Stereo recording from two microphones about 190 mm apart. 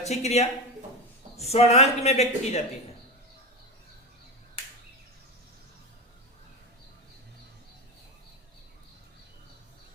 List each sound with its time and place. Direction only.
0.0 s speech: 35° left (ahead or behind)